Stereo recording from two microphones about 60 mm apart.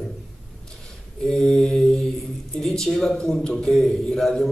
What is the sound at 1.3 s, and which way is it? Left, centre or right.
Mantra, centre.